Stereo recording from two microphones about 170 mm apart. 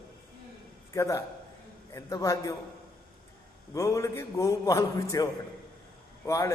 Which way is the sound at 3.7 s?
20° left (ahead or behind).